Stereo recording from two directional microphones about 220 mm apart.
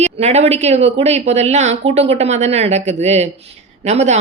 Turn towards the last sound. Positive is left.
turn(degrees=-30)  # may be behind; listen again after turning